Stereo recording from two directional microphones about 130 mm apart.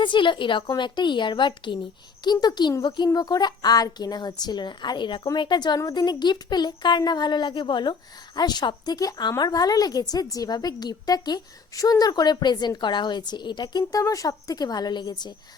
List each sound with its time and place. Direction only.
0.0 s a woman's voice: 40° left (ahead or behind)